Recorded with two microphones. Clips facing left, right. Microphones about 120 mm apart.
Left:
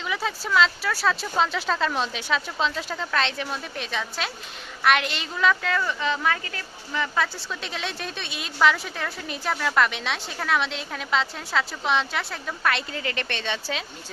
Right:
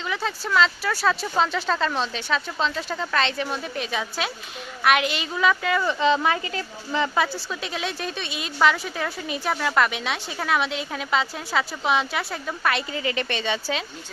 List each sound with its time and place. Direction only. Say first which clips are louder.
0.0 s a woman's voice: right 1 dB; centre (ahead or behind)
5.8 s a woman's voice: right 5 dB; 25° right (ahead or behind)
7.5 s a woman's voice: right 3 dB; 5° right (ahead or behind)